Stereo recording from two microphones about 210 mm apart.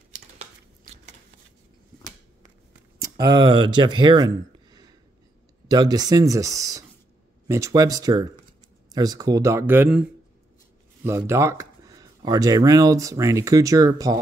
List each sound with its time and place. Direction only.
3.0 s speech: 20° right (ahead or behind)
11.1 s speech: 15° right (ahead or behind)